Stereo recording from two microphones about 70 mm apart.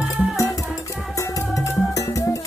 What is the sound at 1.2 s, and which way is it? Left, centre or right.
Music, left.